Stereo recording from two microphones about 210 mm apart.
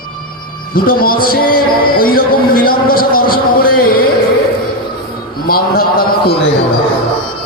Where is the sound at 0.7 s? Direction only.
45° left (ahead or behind).